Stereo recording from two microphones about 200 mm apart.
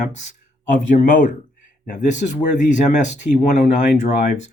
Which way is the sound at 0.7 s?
40° left (ahead or behind).